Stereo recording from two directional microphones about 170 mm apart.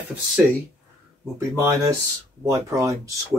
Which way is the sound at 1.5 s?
15° right (ahead or behind).